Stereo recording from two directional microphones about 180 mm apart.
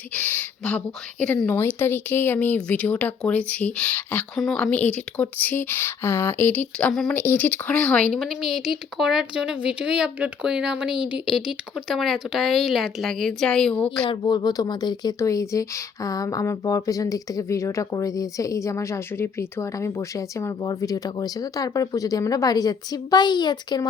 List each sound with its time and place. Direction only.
0.1 s speech: 10° left (ahead or behind)
14.0 s speech: 25° left (ahead or behind)